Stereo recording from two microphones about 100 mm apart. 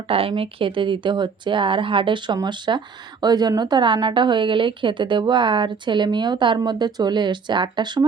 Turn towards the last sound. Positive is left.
turn(degrees=-50)  # may be behind; listen again after turning